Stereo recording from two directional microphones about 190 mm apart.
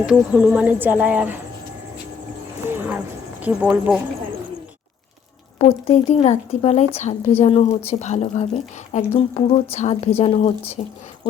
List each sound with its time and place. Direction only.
0.0 s speech: 5° right (ahead or behind)
2.6 s a sound: 10° right (ahead or behind)
3.4 s speech: 5° right (ahead or behind)
5.5 s a woman's voice: 30° left (ahead or behind)